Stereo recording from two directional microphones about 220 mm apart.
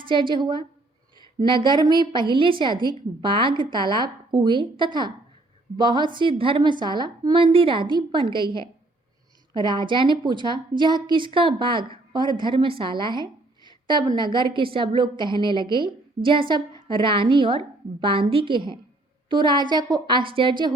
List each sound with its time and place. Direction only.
0.1 s a woman's voice: 20° right (ahead or behind)
13.7 s a sound: 20° right (ahead or behind)
14.2 s a woman's voice: 20° right (ahead or behind)